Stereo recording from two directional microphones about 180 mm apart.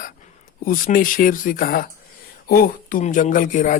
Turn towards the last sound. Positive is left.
turn(degrees=45)  # may be behind; listen again after turning